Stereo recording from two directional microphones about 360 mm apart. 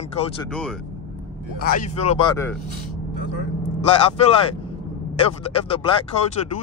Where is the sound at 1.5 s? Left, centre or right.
Left.